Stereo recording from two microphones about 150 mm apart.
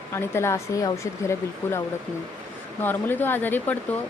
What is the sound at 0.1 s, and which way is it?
A woman's voice, 15° left (ahead or behind).